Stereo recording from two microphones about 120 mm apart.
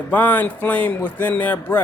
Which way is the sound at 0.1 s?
15° left (ahead or behind).